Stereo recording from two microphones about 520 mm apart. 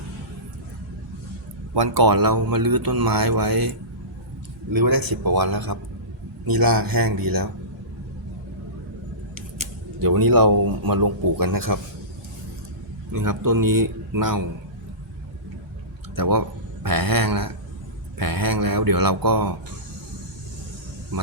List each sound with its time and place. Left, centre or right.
1.7 s speech: right
10.0 s speech: right
13.1 s speech: right
16.1 s speech: right